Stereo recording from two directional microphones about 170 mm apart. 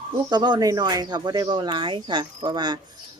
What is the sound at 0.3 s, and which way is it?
Speech, 25° right (ahead or behind).